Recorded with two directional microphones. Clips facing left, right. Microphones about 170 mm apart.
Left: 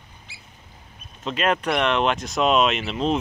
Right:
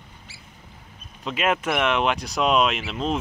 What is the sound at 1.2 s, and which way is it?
Speech, 10° right (ahead or behind).